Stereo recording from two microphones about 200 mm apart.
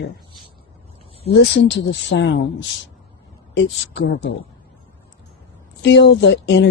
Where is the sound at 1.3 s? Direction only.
60° left (ahead or behind).